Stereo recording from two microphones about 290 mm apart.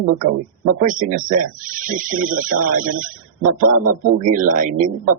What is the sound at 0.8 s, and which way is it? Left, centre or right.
Speech, right.